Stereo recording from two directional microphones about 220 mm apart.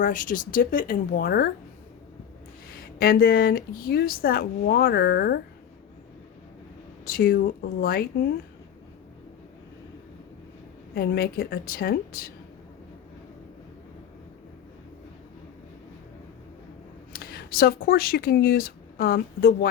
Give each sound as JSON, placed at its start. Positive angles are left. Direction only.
{"t": 0.0, "sound": "speech", "side_deg": 35}
{"t": 3.0, "sound": "speech", "side_deg": 45}
{"t": 7.0, "sound": "speech", "side_deg": 40}
{"t": 10.9, "sound": "speech", "side_deg": 45}
{"t": 17.1, "sound": "speech", "side_deg": 45}